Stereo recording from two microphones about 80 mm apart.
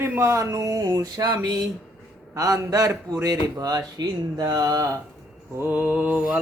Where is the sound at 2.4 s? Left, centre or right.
Right.